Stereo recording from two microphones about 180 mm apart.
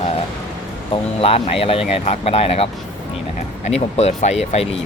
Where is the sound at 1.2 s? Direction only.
30° left (ahead or behind).